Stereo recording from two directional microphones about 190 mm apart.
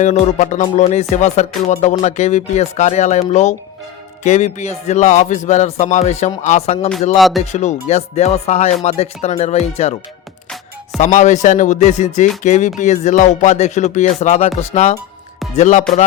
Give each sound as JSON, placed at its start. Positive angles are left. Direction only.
{"t": 0.0, "sound": "speech", "side_deg": 35}
{"t": 7.2, "sound": "speech", "side_deg": 0}
{"t": 7.5, "sound": "speech", "side_deg": 35}
{"t": 11.0, "sound": "speech", "side_deg": 40}